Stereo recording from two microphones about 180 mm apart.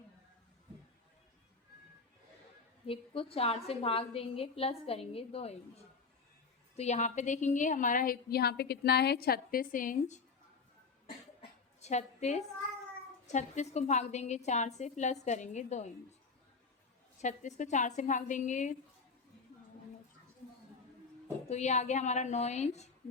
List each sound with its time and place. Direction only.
2.8 s a woman's voice: 30° left (ahead or behind)
6.7 s a woman's voice: 40° left (ahead or behind)
11.8 s a woman's voice: 40° left (ahead or behind)
17.2 s a woman's voice: 40° left (ahead or behind)
21.5 s a woman's voice: 40° left (ahead or behind)